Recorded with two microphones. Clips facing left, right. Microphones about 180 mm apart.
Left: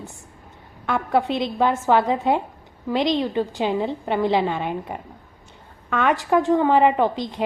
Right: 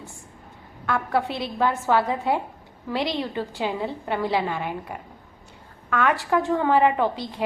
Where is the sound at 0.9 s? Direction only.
20° left (ahead or behind).